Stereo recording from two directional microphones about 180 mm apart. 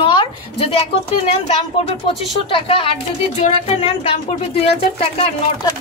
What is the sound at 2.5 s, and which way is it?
Speech, 30° left (ahead or behind).